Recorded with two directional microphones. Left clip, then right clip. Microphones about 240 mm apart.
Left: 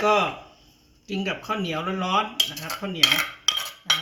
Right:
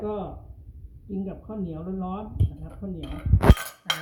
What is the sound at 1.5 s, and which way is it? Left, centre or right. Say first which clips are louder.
Speech: left 10 dB; left.